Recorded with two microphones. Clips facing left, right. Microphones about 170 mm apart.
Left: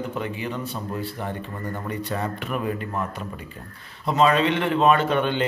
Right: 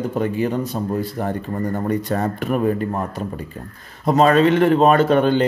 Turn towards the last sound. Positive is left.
turn(degrees=-40)  # may be behind; listen again after turning